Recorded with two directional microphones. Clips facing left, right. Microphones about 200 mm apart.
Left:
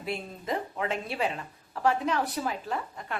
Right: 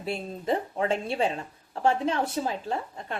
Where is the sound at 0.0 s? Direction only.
30° right (ahead or behind).